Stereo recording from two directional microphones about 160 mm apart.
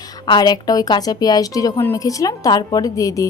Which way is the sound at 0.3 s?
25° left (ahead or behind).